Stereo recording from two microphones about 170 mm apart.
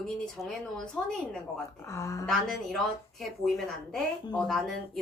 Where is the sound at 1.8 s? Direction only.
20° left (ahead or behind).